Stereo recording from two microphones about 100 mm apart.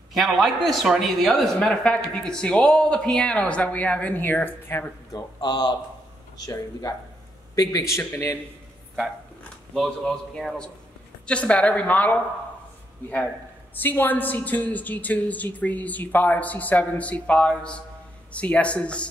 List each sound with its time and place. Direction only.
0.1 s speech: centre (ahead or behind); by 4.9 s 20° left (ahead or behind)
5.1 s speech: 45° left (ahead or behind); by 8.4 s 25° left (ahead or behind)
9.8 s a man's voice: 5° left (ahead or behind)